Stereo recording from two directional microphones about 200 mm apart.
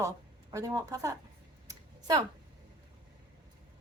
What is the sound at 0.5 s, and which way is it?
Speech, 15° right (ahead or behind).